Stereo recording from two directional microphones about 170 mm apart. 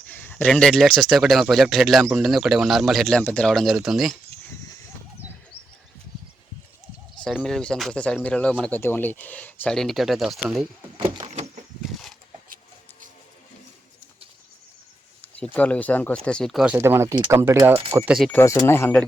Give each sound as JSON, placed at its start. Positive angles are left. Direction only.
{"t": 0.1, "sound": "speech", "side_deg": 10}
{"t": 7.3, "sound": "speech", "side_deg": 0}
{"t": 10.9, "sound": "a sound", "side_deg": -30}
{"t": 15.2, "sound": "speech", "side_deg": 10}
{"t": 16.7, "sound": "speech", "side_deg": -15}
{"t": 18.3, "sound": "speech", "side_deg": 15}